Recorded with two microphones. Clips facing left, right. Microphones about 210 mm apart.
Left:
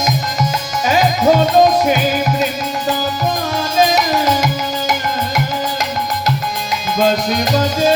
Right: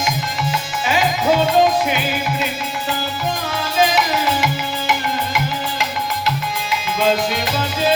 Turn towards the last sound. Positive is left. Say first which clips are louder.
# left 5 dB
turn(degrees=40)  # may be behind; listen again after turning